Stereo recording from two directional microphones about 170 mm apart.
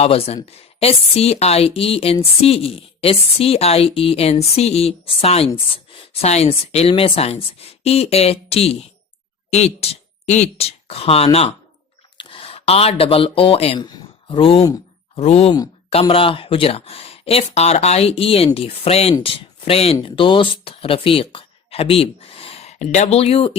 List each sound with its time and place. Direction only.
0.0 s a woman's voice: 35° left (ahead or behind)